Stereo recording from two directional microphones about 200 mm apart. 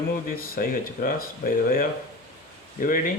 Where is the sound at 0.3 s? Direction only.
45° left (ahead or behind).